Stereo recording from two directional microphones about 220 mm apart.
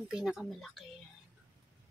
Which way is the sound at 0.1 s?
Centre (ahead or behind).